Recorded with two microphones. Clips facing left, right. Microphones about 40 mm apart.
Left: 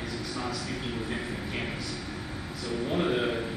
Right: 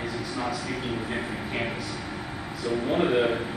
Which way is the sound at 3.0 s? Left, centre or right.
Centre.